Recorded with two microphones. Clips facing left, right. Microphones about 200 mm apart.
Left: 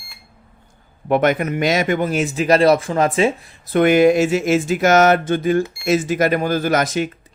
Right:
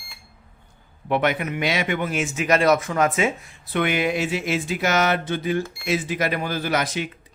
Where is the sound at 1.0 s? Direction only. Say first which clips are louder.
Left 6 dB; 45° left (ahead or behind).